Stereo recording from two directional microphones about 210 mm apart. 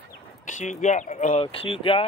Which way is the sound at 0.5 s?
35° left (ahead or behind).